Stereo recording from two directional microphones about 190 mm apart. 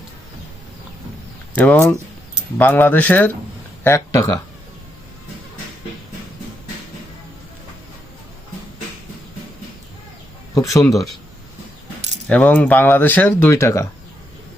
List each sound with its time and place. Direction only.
1.5 s speech: 10° left (ahead or behind)
10.5 s speech: 15° left (ahead or behind)
12.3 s speech: 5° left (ahead or behind)